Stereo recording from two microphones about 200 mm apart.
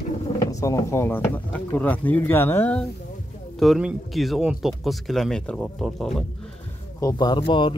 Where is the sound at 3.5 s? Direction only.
Centre (ahead or behind).